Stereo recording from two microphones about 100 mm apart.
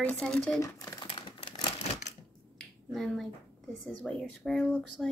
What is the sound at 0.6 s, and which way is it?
Speech, 35° left (ahead or behind).